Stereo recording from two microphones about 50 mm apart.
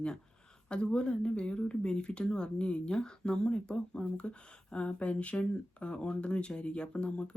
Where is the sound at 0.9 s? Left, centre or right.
Centre.